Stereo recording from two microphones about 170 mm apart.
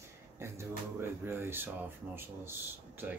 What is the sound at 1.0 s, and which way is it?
Speech, 15° right (ahead or behind).